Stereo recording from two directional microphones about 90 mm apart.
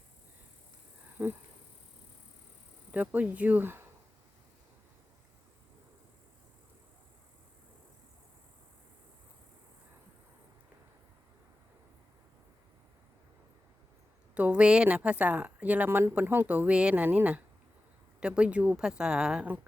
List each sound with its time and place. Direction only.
1.2 s insect: 30° right (ahead or behind)
2.9 s speech: 15° right (ahead or behind)
14.3 s speech: 15° right (ahead or behind)